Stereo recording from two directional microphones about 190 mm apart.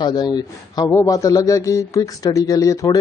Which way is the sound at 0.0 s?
20° left (ahead or behind).